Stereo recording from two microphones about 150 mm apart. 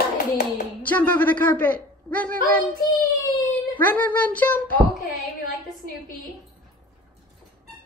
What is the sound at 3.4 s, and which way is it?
A child's voice, 10° left (ahead or behind).